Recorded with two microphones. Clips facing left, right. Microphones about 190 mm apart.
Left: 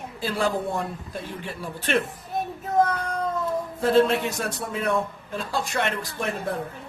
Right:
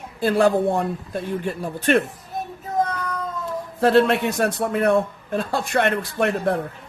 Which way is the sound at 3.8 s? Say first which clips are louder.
Right 3 dB; 70° right (ahead or behind).